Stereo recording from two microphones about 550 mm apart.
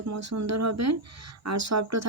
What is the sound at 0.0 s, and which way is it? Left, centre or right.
Speech, right.